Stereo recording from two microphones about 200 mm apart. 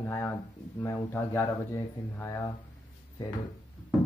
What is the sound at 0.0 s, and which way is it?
Speech, 10° left (ahead or behind).